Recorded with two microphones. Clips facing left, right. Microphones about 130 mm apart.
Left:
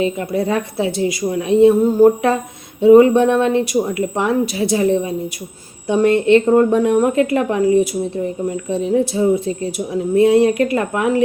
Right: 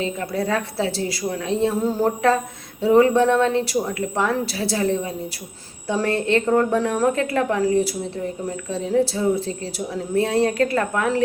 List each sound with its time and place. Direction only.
0.0 s speech: 20° left (ahead or behind)